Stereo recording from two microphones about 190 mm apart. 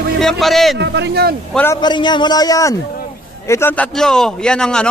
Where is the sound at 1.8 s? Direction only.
25° left (ahead or behind).